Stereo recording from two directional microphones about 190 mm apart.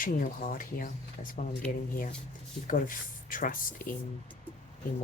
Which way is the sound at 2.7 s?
45° left (ahead or behind).